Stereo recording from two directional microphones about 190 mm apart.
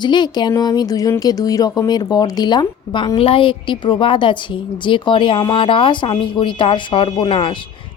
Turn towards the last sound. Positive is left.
turn(degrees=25)  # may be behind; listen again after turning